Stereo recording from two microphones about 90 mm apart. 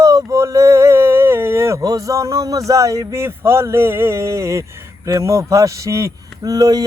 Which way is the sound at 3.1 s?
30° right (ahead or behind).